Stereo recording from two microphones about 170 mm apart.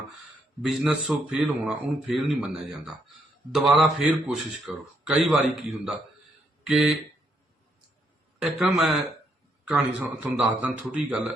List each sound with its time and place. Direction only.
0.6 s speech: centre (ahead or behind)
8.4 s a man's voice: 5° right (ahead or behind)